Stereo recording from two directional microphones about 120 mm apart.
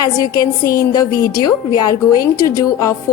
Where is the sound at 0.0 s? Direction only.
30° left (ahead or behind).